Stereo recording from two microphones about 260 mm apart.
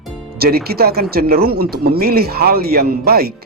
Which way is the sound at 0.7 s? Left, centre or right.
Right.